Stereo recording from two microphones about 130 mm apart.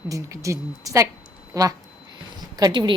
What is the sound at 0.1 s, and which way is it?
Speech, 25° right (ahead or behind).